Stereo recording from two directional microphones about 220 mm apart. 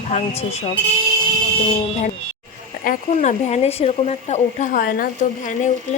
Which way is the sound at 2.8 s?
35° left (ahead or behind).